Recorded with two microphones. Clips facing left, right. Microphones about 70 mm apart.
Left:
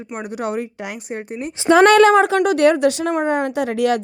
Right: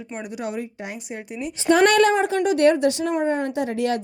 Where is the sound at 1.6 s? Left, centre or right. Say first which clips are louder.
Left 5 dB; left.